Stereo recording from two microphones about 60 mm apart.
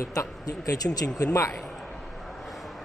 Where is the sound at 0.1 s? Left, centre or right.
Left.